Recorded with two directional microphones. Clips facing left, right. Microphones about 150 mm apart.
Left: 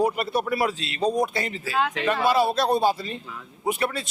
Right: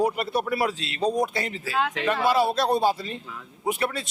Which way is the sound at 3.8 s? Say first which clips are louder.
Left 1 dB; 15° left (ahead or behind).